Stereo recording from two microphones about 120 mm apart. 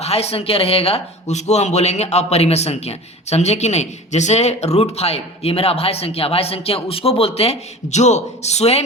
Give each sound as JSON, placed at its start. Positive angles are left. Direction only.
{"t": 0.0, "sound": "speech", "side_deg": 60}